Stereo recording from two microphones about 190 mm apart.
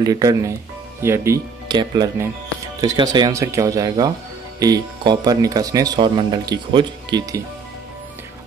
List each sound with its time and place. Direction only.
0.0 s speech: 20° right (ahead or behind)